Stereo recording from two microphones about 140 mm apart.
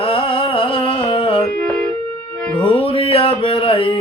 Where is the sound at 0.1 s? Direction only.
40° left (ahead or behind).